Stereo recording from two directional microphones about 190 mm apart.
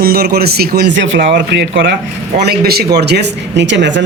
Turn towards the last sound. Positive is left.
turn(degrees=-70)  # may be behind; listen again after turning